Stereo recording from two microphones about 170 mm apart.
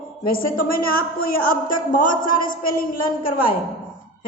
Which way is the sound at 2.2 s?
55° left (ahead or behind).